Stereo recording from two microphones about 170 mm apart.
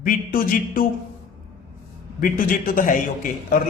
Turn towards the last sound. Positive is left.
turn(degrees=50)  # may be behind; listen again after turning